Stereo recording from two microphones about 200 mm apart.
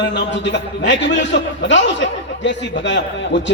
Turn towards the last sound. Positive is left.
turn(degrees=60)  # may be behind; listen again after turning